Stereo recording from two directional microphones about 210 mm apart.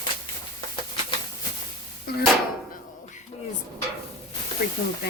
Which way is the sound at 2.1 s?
45° left (ahead or behind).